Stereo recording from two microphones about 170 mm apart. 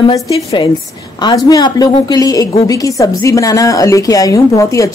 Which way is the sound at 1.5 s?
25° left (ahead or behind).